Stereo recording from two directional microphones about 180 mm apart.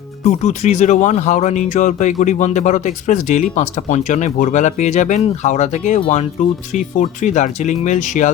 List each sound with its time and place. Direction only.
0.3 s speech: 40° left (ahead or behind)